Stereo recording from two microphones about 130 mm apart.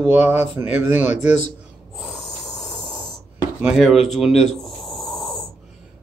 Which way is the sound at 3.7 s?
Centre (ahead or behind).